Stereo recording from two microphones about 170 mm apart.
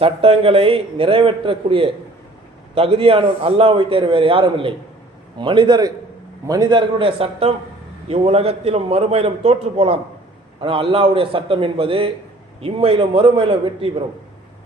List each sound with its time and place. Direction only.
0.0 s a man's voice: 35° right (ahead or behind)